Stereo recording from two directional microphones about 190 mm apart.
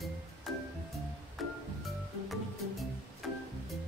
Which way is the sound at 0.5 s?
Centre (ahead or behind).